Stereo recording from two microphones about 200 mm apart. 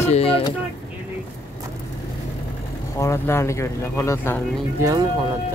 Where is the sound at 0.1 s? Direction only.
30° left (ahead or behind).